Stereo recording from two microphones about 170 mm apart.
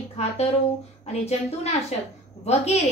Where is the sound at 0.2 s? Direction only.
35° left (ahead or behind).